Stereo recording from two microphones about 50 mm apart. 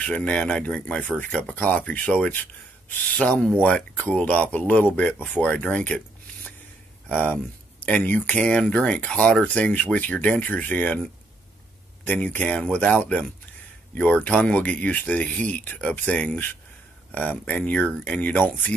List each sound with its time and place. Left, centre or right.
0.0 s speech: left
4.2 s speech: left
8.4 s speech: left
12.0 s speech: left
18.3 s speech: left